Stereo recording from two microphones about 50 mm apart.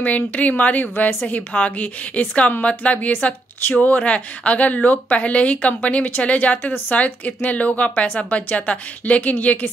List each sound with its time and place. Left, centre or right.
0.0 s a woman's voice: left